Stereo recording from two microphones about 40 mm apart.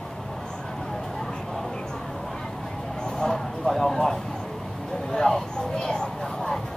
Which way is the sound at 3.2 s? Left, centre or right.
Centre.